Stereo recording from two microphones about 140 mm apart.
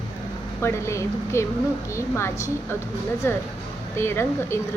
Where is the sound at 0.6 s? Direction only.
20° left (ahead or behind).